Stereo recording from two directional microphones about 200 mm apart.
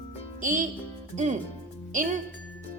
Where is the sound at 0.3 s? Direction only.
40° right (ahead or behind).